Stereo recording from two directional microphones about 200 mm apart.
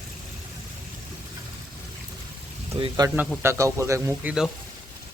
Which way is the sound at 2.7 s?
20° right (ahead or behind).